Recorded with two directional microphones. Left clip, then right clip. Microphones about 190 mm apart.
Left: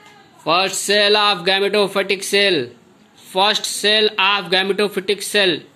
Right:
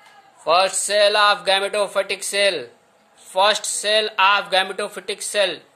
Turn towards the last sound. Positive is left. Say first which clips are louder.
# left 4 dB
turn(degrees=0)  # may be behind; listen again after turning